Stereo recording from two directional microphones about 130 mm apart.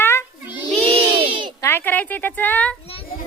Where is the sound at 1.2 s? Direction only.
40° right (ahead or behind).